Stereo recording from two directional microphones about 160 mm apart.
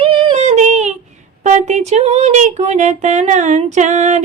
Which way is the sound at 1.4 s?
50° right (ahead or behind).